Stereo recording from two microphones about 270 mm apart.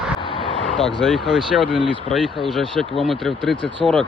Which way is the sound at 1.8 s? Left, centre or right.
Centre.